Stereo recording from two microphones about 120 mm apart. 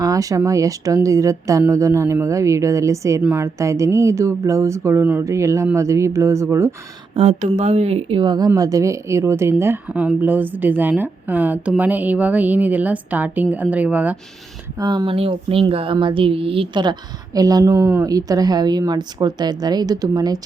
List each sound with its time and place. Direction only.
0.0 s speech: 30° right (ahead or behind)
7.1 s a woman's voice: 55° right (ahead or behind)
8.2 s a woman's voice: 35° right (ahead or behind); by 14.2 s 10° right (ahead or behind)
14.8 s speech: 35° right (ahead or behind)
15.1 s speech: 50° right (ahead or behind); by 20.4 s 30° right (ahead or behind)